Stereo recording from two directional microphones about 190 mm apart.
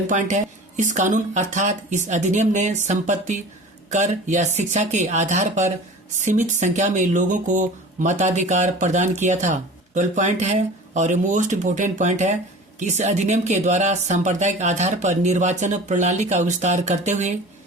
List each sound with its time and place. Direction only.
0.1 s speech: 40° right (ahead or behind)